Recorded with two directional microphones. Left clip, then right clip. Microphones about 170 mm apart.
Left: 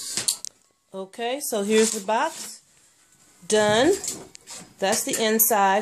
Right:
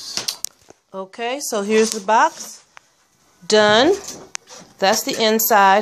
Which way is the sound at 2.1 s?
20° right (ahead or behind).